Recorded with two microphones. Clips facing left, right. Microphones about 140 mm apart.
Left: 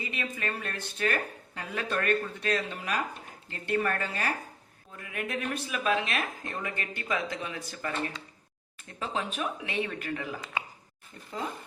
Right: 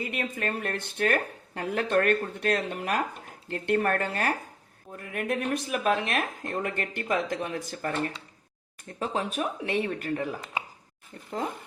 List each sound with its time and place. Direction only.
0.0 s speech: 55° right (ahead or behind)
5.1 s speech: 40° right (ahead or behind)
9.0 s speech: 40° right (ahead or behind)